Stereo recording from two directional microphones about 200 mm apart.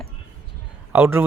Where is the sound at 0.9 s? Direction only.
10° right (ahead or behind).